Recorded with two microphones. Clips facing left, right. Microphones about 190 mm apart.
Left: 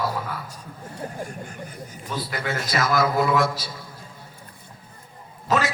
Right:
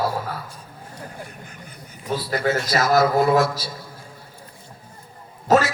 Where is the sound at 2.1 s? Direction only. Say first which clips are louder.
Right 7 dB; 40° right (ahead or behind).